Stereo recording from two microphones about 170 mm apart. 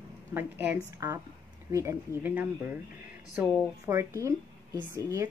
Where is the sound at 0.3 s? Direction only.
10° right (ahead or behind).